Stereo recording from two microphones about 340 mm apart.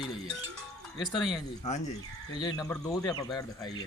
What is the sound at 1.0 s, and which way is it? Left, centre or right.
Speech, centre.